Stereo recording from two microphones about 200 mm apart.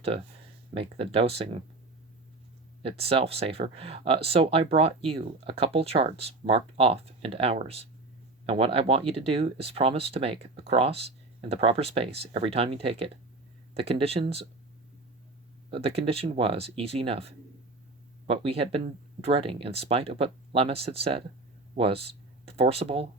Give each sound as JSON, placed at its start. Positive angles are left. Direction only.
{"t": 0.7, "sound": "speech", "side_deg": -25}
{"t": 2.8, "sound": "speech", "side_deg": -30}
{"t": 15.7, "sound": "speech", "side_deg": -30}